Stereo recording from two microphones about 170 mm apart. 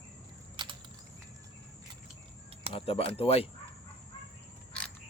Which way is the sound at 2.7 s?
35° left (ahead or behind).